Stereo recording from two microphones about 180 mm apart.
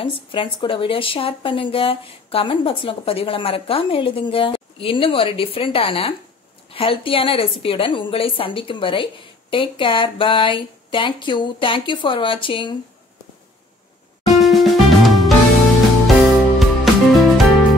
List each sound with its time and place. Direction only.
0.0 s a woman's voice: 30° left (ahead or behind)
14.2 s music: centre (ahead or behind)
16.5 s music: centre (ahead or behind)